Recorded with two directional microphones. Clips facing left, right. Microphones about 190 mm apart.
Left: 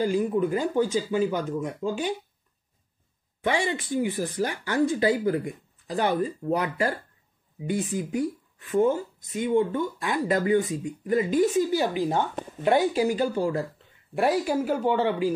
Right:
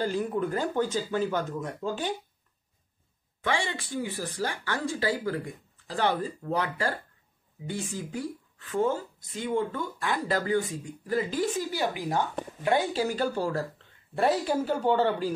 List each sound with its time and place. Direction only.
0.0 s speech: 10° left (ahead or behind)
3.4 s speech: 20° left (ahead or behind)
8.1 s speech: 20° left (ahead or behind)